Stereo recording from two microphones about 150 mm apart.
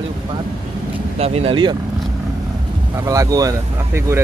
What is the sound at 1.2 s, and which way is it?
Speech, 45° right (ahead or behind).